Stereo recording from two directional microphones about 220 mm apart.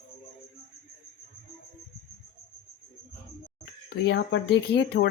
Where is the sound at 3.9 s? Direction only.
50° left (ahead or behind).